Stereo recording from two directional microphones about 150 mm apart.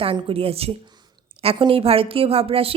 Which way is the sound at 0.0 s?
40° right (ahead or behind).